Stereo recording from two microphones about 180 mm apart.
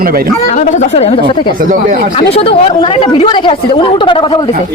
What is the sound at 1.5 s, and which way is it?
Speech, 45° right (ahead or behind).